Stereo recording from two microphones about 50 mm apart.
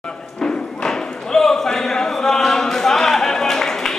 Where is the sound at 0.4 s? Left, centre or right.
Centre.